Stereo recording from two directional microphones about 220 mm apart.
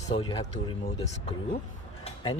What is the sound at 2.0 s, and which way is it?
Music, 20° left (ahead or behind).